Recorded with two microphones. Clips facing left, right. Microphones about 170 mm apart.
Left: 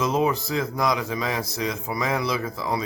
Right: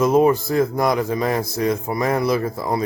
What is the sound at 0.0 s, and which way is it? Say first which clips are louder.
A man's voice: right 7 dB; 50° right (ahead or behind).